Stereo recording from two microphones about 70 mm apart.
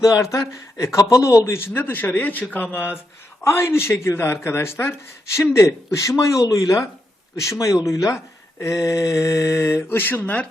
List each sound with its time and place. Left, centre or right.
0.0 s speech: left
1.5 s speech: left
3.4 s speech: left